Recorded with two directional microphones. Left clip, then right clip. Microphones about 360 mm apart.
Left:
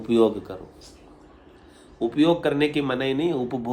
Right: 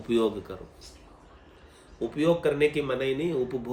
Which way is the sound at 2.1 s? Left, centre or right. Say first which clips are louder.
Left 3 dB; centre.